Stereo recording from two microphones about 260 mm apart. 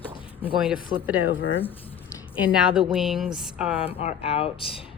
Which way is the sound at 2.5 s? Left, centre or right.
Centre.